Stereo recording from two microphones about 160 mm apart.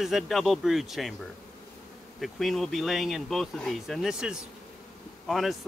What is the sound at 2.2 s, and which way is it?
Speech, centre (ahead or behind).